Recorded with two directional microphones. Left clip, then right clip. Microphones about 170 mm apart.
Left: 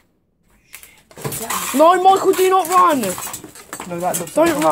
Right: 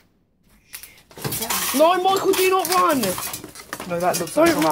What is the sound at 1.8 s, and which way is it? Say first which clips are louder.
Speech: left 6 dB; 40° left (ahead or behind).